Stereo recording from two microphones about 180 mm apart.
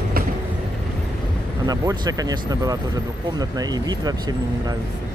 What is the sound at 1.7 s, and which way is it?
Speech, 20° right (ahead or behind).